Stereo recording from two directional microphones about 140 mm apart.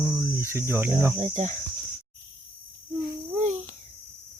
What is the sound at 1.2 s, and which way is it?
Speech, 55° right (ahead or behind).